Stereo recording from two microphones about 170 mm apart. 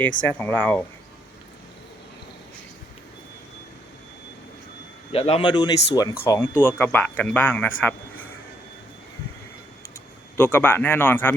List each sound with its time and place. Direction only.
0.2 s a man's voice: 10° left (ahead or behind)
5.1 s a man's voice: 35° left (ahead or behind); by 7.9 s 10° left (ahead or behind)
10.3 s a man's voice: 10° left (ahead or behind)